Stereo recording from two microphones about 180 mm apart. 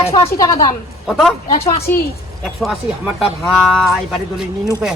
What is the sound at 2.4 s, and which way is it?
Speech, centre (ahead or behind).